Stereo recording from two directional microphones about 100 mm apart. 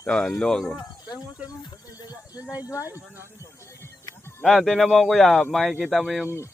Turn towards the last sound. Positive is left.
turn(degrees=0)  # may be behind; listen again after turning